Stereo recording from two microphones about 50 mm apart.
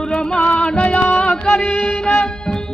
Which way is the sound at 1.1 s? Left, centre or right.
Centre.